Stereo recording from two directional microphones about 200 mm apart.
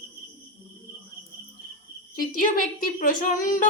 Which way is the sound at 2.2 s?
45° left (ahead or behind).